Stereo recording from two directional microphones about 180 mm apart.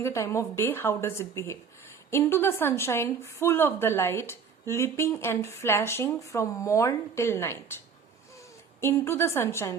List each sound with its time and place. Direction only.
0.0 s a woman's voice: 15° left (ahead or behind)
8.8 s a woman's voice: 15° left (ahead or behind)